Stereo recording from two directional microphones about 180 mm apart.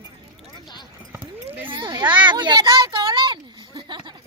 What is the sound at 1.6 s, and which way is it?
Speech, 25° right (ahead or behind).